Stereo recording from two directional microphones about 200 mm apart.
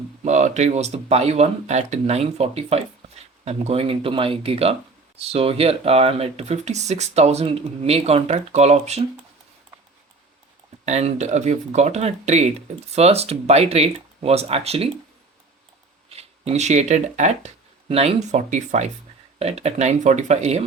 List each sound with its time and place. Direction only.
0.3 s speech: 35° right (ahead or behind)
10.8 s speech: 35° right (ahead or behind)
16.0 s speech: 30° right (ahead or behind)